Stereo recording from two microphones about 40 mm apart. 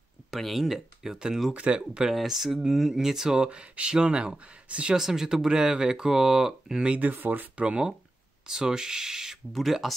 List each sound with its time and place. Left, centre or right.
0.3 s speech: centre
1.5 s speech: right
1.8 s speech: centre
3.4 s speech: right
4.9 s speech: centre
7.0 s speech: right
7.5 s speech: right; by 9.9 s centre